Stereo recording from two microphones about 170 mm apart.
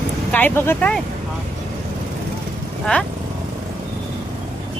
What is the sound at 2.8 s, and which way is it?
Speech, 5° left (ahead or behind).